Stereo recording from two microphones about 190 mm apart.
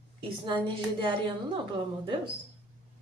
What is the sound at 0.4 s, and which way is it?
Speech, 25° right (ahead or behind).